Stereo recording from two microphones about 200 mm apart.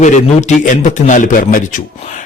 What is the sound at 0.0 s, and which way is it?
A man's voice, 40° left (ahead or behind).